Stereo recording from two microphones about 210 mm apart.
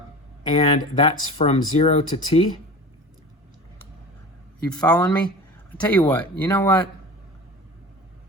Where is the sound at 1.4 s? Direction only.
30° left (ahead or behind).